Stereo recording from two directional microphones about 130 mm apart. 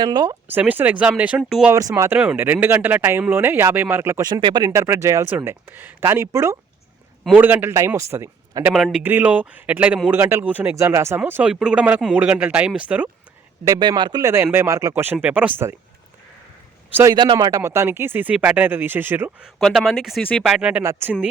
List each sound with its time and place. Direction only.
0.0 s speech: 35° right (ahead or behind)
0.4 s speech: 15° right (ahead or behind)
1.7 s speech: 25° right (ahead or behind)
2.1 s speech: 10° right (ahead or behind)
4.3 s speech: 35° right (ahead or behind)
4.7 s speech: 20° right (ahead or behind)
8.7 s speech: 5° right (ahead or behind)
9.0 s speech: 15° right (ahead or behind)
13.7 s speech: 35° right (ahead or behind)
15.0 s speech: 15° right (ahead or behind)
17.2 s speech: 35° right (ahead or behind); by 19.3 s 15° right (ahead or behind)
19.5 s speech: centre (ahead or behind)